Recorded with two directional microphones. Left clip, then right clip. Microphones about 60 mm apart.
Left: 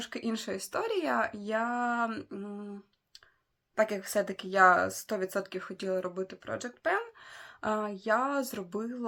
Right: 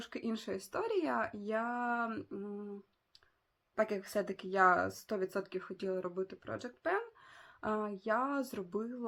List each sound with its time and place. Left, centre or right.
0.0 s speech: left
3.8 s speech: left